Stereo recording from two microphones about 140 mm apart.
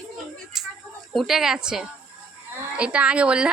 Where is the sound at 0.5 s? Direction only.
Centre (ahead or behind).